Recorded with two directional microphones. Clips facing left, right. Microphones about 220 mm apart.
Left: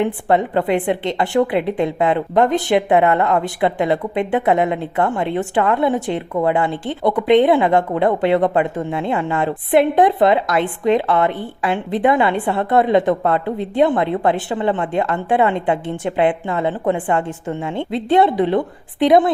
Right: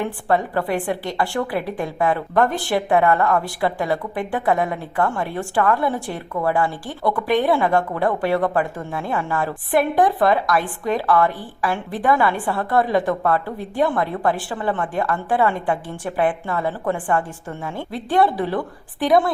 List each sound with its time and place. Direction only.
0.0 s a woman's voice: 20° left (ahead or behind)